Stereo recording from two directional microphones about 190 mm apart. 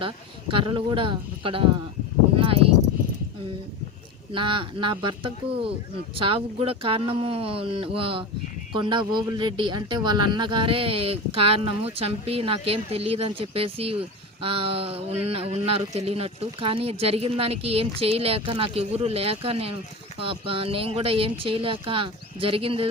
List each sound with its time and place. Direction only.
0.5 s speech: 25° right (ahead or behind)
4.3 s speech: 25° right (ahead or behind)